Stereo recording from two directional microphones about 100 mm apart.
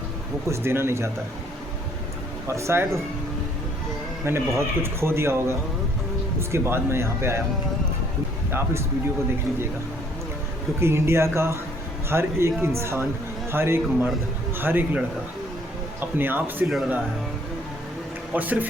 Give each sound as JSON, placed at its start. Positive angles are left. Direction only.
{"t": 0.4, "sound": "speech", "side_deg": -25}
{"t": 2.5, "sound": "speech", "side_deg": -30}
{"t": 4.2, "sound": "speech", "side_deg": -25}
{"t": 10.8, "sound": "speech", "side_deg": -25}
{"t": 16.6, "sound": "speech", "side_deg": 0}
{"t": 18.3, "sound": "speech", "side_deg": -15}